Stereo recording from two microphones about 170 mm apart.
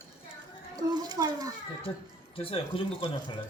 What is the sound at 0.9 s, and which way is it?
Speech, 25° right (ahead or behind).